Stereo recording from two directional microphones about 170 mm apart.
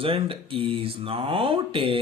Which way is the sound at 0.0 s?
30° right (ahead or behind).